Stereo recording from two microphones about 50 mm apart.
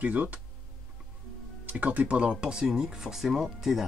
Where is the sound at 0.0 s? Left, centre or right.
Right.